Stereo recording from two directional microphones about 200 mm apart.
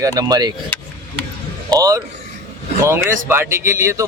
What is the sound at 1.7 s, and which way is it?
Speech, 15° right (ahead or behind).